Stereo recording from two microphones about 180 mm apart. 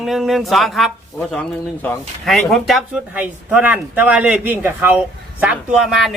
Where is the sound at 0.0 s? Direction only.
Centre (ahead or behind).